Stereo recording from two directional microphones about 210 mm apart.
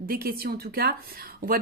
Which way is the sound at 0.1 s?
45° right (ahead or behind).